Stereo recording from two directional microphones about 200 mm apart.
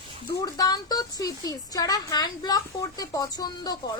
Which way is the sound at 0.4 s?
20° left (ahead or behind).